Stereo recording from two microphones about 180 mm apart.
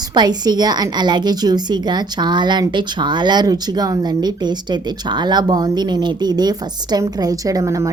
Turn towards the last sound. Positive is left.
turn(degrees=-15)  # may be behind; listen again after turning